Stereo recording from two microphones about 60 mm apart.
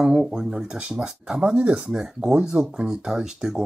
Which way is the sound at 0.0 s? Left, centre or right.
Centre.